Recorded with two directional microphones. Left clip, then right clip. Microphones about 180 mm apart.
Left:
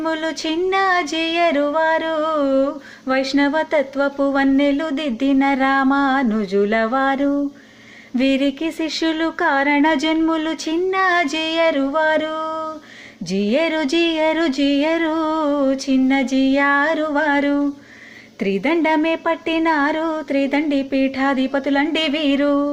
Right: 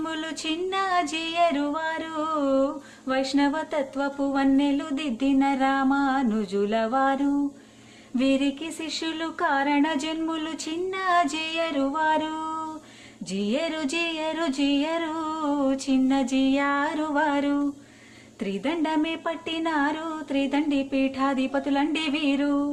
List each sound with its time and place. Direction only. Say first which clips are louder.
0.0 s music: left 9 dB; 20° left (ahead or behind)
8.2 s music: left 6 dB; 20° left (ahead or behind)